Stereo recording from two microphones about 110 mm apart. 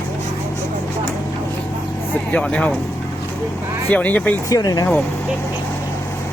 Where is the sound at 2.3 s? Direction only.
10° left (ahead or behind).